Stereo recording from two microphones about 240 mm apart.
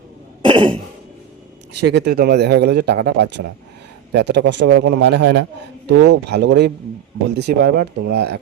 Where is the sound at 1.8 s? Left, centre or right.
Right.